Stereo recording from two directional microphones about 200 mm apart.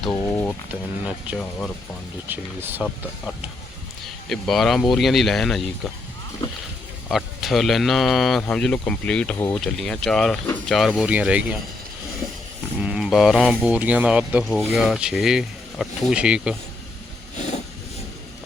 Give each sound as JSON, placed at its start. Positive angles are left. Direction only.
{"t": 0.0, "sound": "a sound", "side_deg": 10}
{"t": 0.7, "sound": "speech", "side_deg": -5}
{"t": 1.4, "sound": "speech", "side_deg": 5}
{"t": 2.2, "sound": "speech", "side_deg": -10}
{"t": 4.3, "sound": "speech", "side_deg": 0}
{"t": 7.1, "sound": "speech", "side_deg": 0}
{"t": 12.8, "sound": "speech", "side_deg": -5}
{"t": 17.3, "sound": "vehicle", "side_deg": 35}